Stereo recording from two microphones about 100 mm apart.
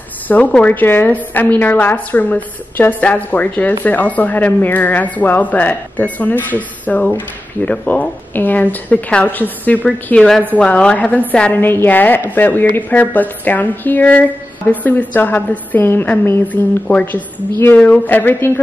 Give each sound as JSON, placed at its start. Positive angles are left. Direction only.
{"t": 0.3, "sound": "a woman's voice", "side_deg": 15}